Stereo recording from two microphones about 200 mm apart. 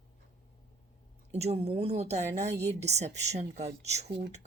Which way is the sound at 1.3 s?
30° right (ahead or behind).